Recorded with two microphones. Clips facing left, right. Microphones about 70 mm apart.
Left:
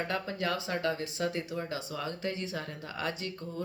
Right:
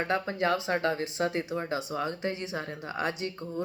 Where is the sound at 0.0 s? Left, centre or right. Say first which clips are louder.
Right 5 dB; right.